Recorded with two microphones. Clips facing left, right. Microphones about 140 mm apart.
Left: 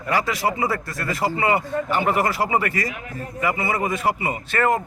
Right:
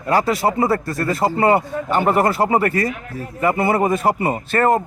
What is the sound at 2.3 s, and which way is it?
Speech, 30° right (ahead or behind).